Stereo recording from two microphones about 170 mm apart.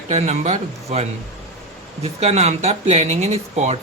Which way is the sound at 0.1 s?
40° right (ahead or behind).